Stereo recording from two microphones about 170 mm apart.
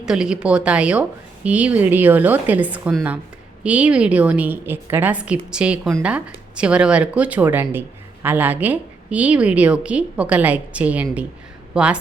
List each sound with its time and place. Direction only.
0.0 s speech: 5° right (ahead or behind)